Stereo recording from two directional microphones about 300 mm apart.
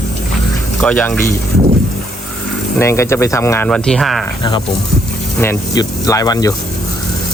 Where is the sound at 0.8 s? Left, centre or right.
Centre.